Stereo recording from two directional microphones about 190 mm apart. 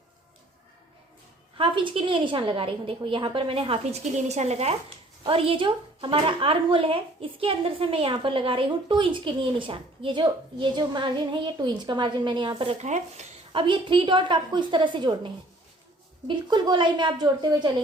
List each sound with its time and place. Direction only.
1.5 s speech: 25° right (ahead or behind)